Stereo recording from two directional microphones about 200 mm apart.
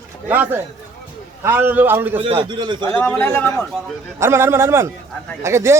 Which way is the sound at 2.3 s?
20° right (ahead or behind).